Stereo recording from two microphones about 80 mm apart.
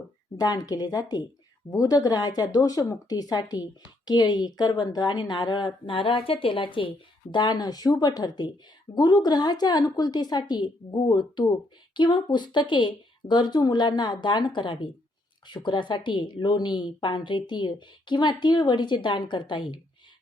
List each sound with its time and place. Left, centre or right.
0.3 s a woman's voice: left